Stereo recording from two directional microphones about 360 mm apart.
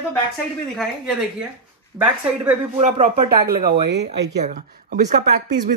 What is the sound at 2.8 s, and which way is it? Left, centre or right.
Speech, right.